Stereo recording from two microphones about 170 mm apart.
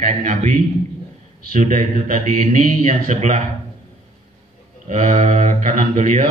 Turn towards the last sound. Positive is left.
turn(degrees=-45)  # may be behind; listen again after turning